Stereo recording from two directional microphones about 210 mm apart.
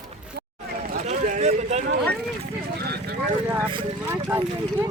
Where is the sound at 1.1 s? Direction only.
35° right (ahead or behind).